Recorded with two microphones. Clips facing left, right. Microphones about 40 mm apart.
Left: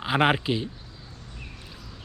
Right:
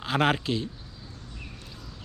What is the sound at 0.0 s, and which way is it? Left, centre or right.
Speech, centre.